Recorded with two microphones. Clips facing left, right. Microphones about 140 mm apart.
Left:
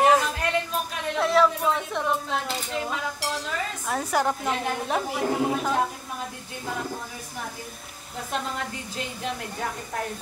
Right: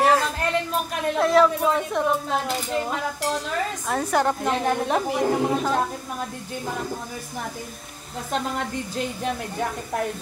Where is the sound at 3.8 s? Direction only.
5° left (ahead or behind).